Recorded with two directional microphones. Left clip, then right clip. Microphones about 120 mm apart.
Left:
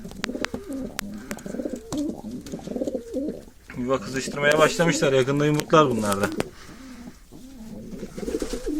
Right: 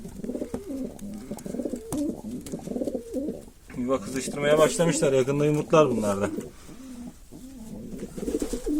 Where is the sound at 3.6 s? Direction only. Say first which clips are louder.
Left 2 dB; centre (ahead or behind).